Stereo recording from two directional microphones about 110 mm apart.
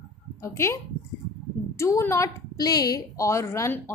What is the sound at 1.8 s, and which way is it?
A woman's voice, 25° left (ahead or behind).